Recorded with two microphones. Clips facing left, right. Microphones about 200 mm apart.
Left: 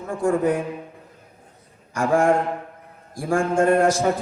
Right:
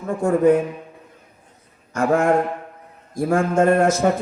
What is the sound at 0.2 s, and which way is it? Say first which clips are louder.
Speech: right 4 dB; 45° right (ahead or behind).